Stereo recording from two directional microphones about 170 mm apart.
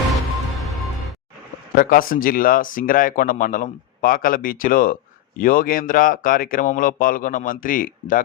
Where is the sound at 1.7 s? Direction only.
55° left (ahead or behind).